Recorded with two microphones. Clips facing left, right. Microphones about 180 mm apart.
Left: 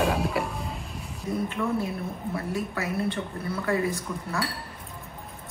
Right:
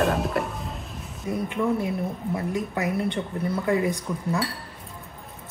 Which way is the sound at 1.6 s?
20° right (ahead or behind).